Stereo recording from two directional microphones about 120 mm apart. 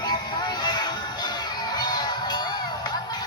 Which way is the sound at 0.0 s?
35° left (ahead or behind).